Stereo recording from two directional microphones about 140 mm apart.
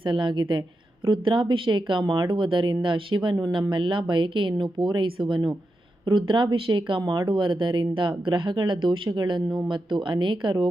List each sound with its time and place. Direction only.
0.0 s speech: 35° right (ahead or behind)